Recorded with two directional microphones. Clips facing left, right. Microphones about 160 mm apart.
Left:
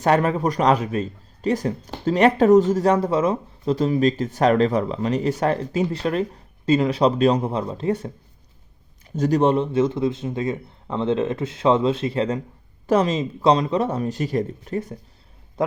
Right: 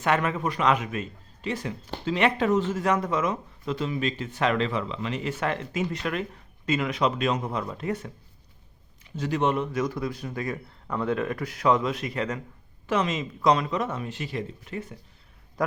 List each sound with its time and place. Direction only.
0.0 s a man's voice: 35° left (ahead or behind)
9.0 s a man's voice: 45° left (ahead or behind)
15.6 s a man's voice: 25° left (ahead or behind)